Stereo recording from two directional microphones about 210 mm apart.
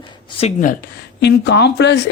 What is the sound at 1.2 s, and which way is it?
Speech, 55° left (ahead or behind).